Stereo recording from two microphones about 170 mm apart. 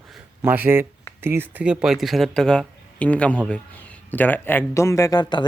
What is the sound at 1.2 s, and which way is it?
Speech, 15° right (ahead or behind).